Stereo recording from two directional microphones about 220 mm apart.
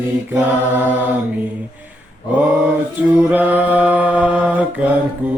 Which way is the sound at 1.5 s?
5° right (ahead or behind).